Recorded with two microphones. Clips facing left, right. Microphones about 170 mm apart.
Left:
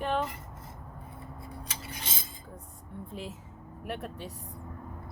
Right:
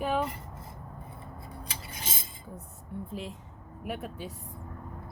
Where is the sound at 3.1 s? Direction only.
Centre (ahead or behind).